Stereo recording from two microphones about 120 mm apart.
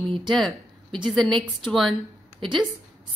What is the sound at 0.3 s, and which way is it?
A woman's voice, 5° left (ahead or behind).